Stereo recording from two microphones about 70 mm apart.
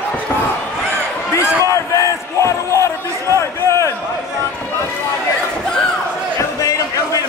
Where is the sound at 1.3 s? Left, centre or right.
Left.